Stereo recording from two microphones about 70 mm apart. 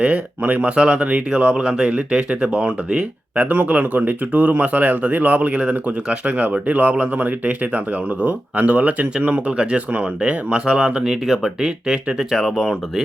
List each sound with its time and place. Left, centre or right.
0.0 s speech: centre